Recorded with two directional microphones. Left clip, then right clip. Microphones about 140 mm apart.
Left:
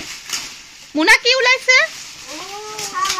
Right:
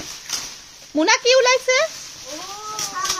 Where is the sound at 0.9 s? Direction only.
10° right (ahead or behind).